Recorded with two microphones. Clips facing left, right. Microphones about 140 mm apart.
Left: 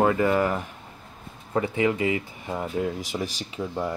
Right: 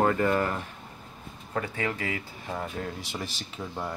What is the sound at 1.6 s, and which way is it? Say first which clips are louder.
Speech: left 8 dB; 15° left (ahead or behind).